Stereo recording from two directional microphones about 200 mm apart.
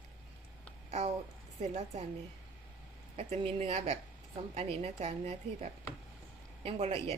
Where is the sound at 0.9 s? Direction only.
35° right (ahead or behind).